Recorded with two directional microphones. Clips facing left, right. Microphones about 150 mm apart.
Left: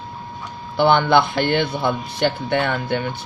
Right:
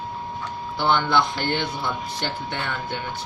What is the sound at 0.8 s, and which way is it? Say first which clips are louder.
Speech: left 6 dB; 65° left (ahead or behind).